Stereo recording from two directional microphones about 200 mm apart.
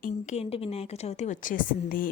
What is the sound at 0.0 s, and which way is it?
A woman's voice, 35° left (ahead or behind).